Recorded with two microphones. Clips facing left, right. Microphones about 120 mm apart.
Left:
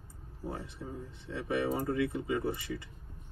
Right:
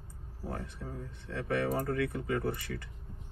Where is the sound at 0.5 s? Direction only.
20° left (ahead or behind).